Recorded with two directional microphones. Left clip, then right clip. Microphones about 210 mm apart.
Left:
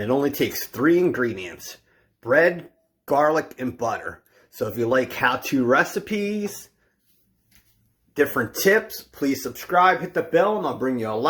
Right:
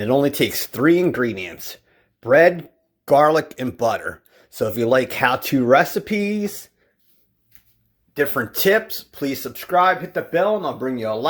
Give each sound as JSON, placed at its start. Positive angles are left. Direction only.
{"t": 0.0, "sound": "speech", "side_deg": -45}
{"t": 8.1, "sound": "speech", "side_deg": -25}